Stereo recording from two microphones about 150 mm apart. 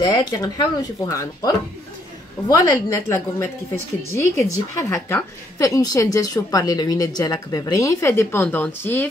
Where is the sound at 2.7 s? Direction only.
15° left (ahead or behind).